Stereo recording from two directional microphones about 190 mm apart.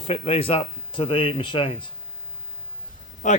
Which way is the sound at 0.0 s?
30° left (ahead or behind).